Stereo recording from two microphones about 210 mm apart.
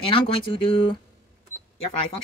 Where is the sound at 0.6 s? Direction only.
25° left (ahead or behind).